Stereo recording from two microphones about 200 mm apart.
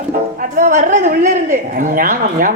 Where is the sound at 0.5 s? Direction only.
40° right (ahead or behind).